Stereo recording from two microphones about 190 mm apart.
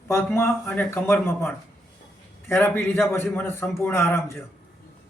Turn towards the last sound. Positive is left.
turn(degrees=10)  # may be behind; listen again after turning